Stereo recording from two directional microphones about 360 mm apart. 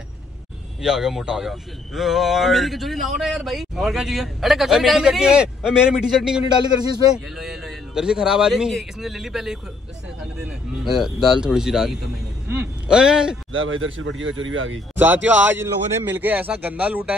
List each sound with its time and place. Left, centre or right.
0.8 s a man's voice: centre
11.0 s a man's voice: centre
13.5 s speech: right
15.0 s a man's voice: centre